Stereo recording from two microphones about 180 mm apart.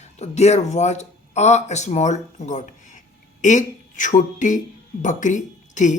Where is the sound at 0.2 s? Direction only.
35° left (ahead or behind).